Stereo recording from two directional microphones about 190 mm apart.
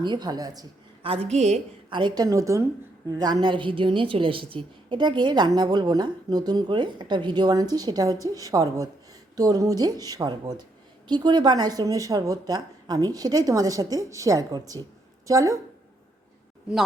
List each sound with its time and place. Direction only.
0.0 s a woman's voice: 20° right (ahead or behind)